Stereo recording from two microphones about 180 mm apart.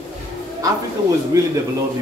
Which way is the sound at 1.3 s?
20° right (ahead or behind).